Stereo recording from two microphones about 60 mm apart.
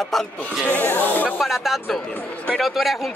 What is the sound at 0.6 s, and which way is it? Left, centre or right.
Speech, left.